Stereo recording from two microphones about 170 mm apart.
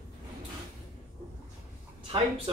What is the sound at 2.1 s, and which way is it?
Speech, 30° right (ahead or behind).